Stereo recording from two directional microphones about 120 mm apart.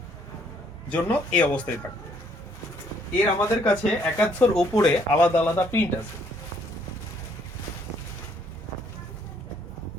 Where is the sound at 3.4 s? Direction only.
20° left (ahead or behind).